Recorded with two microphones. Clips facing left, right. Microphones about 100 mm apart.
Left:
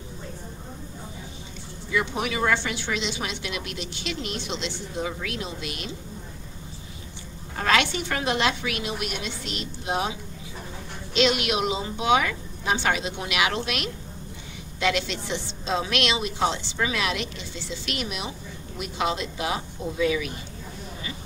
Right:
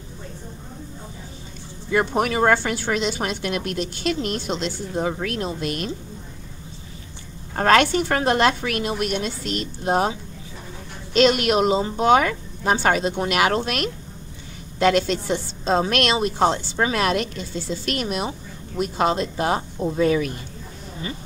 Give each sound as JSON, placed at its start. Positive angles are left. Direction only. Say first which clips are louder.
{"t": 1.9, "sound": "a woman's voice", "louder": "right 6 dB", "side_deg": -50}
{"t": 7.5, "sound": "a woman's voice", "louder": "right 7 dB", "side_deg": -45}
{"t": 11.1, "sound": "a woman's voice", "louder": "right 6 dB", "side_deg": -45}